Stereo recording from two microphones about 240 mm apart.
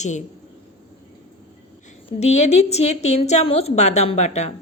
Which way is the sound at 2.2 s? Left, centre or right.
Left.